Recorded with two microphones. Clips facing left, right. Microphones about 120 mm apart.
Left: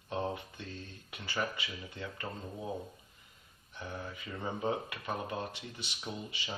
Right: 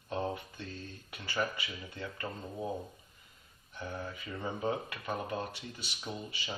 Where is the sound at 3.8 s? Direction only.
15° left (ahead or behind).